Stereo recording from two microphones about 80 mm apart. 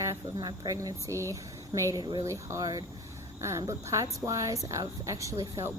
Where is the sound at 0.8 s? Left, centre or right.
Right.